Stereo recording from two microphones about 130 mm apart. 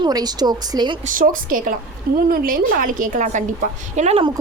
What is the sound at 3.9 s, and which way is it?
Speech, 65° right (ahead or behind).